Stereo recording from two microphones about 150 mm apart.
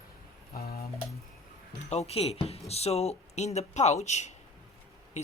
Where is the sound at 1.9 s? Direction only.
45° left (ahead or behind).